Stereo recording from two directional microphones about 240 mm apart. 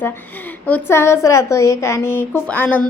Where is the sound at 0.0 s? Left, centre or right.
Centre.